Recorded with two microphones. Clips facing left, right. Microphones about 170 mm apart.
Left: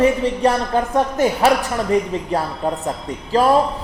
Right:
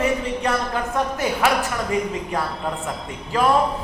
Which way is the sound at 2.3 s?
30° left (ahead or behind).